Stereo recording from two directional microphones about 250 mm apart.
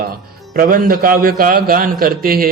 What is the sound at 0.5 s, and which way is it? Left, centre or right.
Mantra, right.